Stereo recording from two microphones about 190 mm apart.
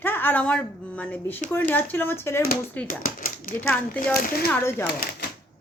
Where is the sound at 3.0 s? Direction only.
50° left (ahead or behind).